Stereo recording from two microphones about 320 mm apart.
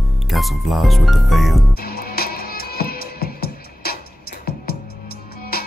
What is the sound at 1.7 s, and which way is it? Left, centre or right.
Music, left.